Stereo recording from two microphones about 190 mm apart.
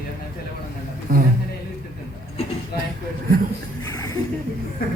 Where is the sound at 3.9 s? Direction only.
15° left (ahead or behind).